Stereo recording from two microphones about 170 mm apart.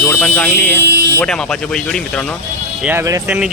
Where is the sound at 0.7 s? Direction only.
75° right (ahead or behind).